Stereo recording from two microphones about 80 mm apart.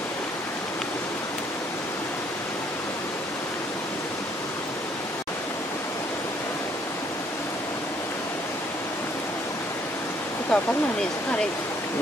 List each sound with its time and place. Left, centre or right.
10.5 s speech: centre